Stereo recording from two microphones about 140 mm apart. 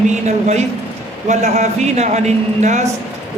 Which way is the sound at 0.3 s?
55° right (ahead or behind).